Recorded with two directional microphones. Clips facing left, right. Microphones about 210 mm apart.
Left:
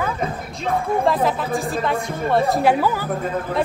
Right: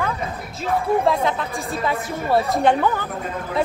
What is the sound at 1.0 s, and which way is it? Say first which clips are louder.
Speech: left 1 dB; centre (ahead or behind).